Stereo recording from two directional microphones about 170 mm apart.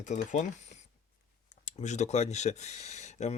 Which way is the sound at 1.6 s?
45° left (ahead or behind).